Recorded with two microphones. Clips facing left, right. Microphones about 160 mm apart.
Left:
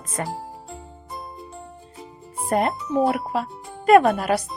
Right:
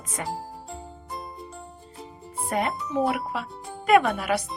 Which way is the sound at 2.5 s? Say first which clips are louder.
Left 5 dB; 45° left (ahead or behind).